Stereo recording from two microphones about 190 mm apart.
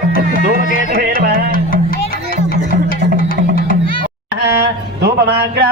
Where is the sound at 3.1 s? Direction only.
50° left (ahead or behind).